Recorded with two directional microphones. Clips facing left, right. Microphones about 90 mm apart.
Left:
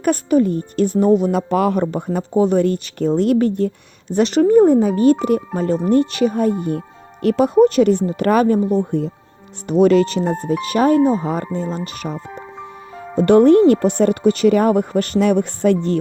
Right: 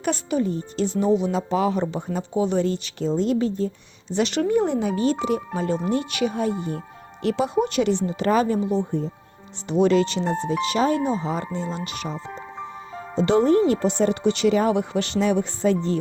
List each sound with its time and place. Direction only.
0.0 s speech: 50° left (ahead or behind)
4.1 s speech: 40° left (ahead or behind)
12.1 s music: 10° left (ahead or behind)
12.9 s music: 5° right (ahead or behind)
13.1 s speech: 55° left (ahead or behind)